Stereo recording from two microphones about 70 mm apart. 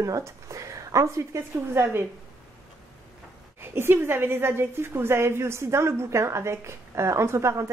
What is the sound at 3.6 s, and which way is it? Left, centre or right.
A woman's voice, right.